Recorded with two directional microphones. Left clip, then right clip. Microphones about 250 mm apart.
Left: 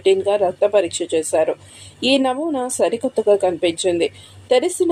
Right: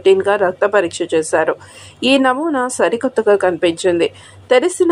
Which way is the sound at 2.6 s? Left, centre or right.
Centre.